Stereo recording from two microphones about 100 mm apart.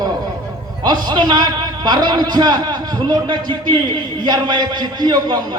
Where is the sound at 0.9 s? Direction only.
50° right (ahead or behind).